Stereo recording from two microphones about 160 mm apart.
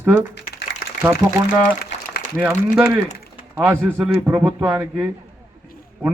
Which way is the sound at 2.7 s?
10° right (ahead or behind).